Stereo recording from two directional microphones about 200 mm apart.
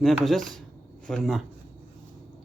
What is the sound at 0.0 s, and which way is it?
Speech, centre (ahead or behind).